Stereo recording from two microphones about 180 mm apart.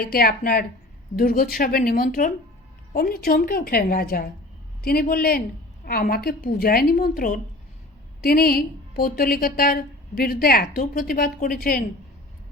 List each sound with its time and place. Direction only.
0.0 s a woman's voice: 55° left (ahead or behind)